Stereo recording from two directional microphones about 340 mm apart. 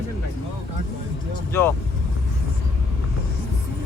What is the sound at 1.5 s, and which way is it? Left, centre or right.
Speech, centre.